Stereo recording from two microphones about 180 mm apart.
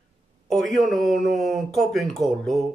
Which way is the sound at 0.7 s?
Centre (ahead or behind).